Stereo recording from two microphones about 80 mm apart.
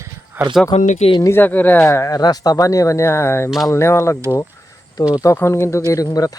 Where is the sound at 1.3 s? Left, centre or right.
Left.